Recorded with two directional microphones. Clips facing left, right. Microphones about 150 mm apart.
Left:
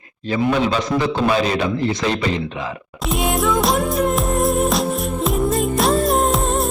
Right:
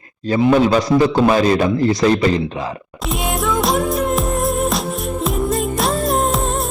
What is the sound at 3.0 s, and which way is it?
Music, centre (ahead or behind).